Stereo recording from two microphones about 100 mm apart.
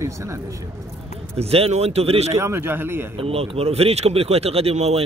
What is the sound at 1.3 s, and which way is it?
Speech, 80° right.